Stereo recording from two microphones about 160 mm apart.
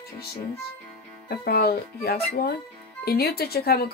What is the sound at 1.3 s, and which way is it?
Speech, 75° left (ahead or behind).